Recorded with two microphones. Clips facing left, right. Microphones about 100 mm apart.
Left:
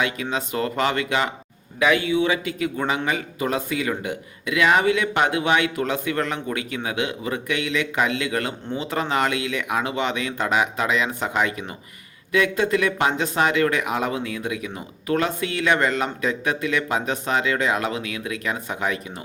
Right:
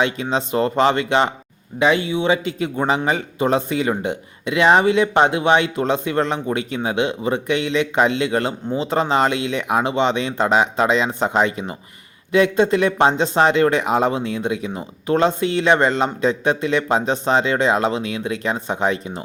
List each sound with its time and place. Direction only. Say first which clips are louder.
0.0 s speech: right 5 dB; 25° right (ahead or behind)